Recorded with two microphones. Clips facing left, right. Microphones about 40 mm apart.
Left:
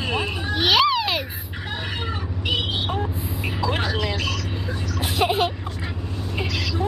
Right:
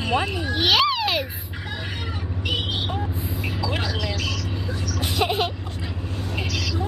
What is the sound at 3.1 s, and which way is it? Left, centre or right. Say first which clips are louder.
Vehicle: even; centre.